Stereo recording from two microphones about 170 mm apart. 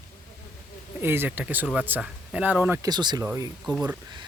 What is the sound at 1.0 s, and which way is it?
Speech, 15° right (ahead or behind).